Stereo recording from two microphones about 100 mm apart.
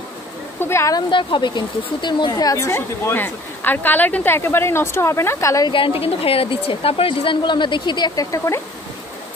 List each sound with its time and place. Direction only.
0.6 s speech: 25° left (ahead or behind)
1.1 s speech: 50° left (ahead or behind); by 5.7 s 30° left (ahead or behind)
5.7 s a woman's voice: 60° left (ahead or behind); by 8.5 s 35° left (ahead or behind)